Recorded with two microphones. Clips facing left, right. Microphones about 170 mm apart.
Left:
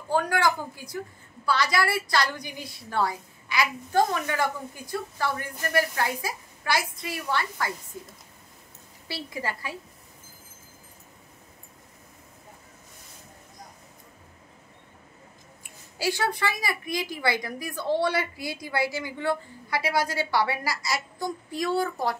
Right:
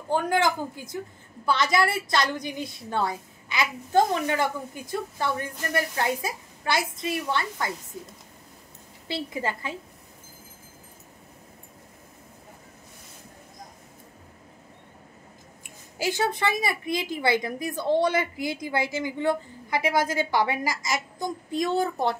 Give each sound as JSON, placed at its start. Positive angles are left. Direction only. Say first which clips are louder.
{"t": 0.1, "sound": "a woman's voice", "louder": "right 1 dB", "side_deg": -20}
{"t": 9.0, "sound": "a woman's voice", "louder": "right 4 dB", "side_deg": -20}
{"t": 16.0, "sound": "a woman's voice", "louder": "right 1 dB", "side_deg": -20}